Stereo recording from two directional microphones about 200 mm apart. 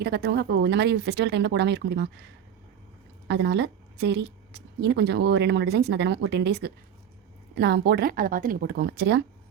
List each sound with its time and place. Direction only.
0.0 s a woman's voice: 55° right (ahead or behind)
3.2 s a woman's voice: 60° right (ahead or behind)